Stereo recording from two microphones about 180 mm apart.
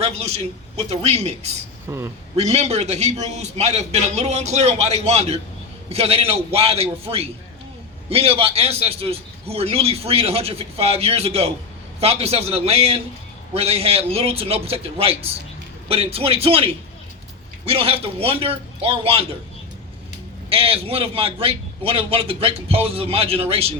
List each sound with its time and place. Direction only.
0.0 s a man's voice: 35° right (ahead or behind)
1.9 s a man's voice: 15° right (ahead or behind)
2.3 s a man's voice: 35° right (ahead or behind)
17.7 s a man's voice: 30° right (ahead or behind)
20.5 s a man's voice: 30° right (ahead or behind)